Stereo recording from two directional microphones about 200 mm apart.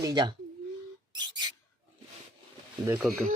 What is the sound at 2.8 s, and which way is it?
Speech, 10° right (ahead or behind).